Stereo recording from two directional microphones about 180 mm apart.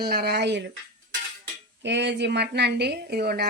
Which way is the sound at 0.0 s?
60° right (ahead or behind).